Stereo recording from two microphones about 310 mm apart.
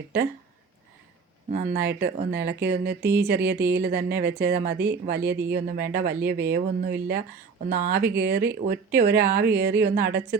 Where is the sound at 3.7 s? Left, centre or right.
Right.